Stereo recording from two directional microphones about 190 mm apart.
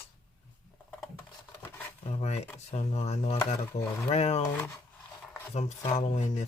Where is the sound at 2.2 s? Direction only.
35° left (ahead or behind).